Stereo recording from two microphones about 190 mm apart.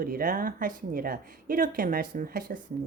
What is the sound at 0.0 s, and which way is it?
Speech, 50° right (ahead or behind).